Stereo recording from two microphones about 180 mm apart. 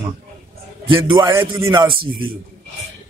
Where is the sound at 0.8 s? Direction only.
25° right (ahead or behind).